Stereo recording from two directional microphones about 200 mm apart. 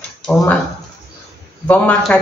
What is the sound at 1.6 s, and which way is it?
Speech, 5° left (ahead or behind).